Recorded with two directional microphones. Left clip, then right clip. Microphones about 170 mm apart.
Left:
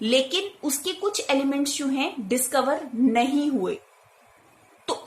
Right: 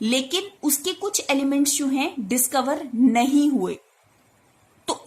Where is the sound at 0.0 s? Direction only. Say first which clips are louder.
Left 2 dB; 40° right (ahead or behind).